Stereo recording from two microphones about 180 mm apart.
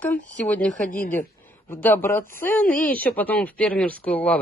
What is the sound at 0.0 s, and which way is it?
Speech, 10° left (ahead or behind).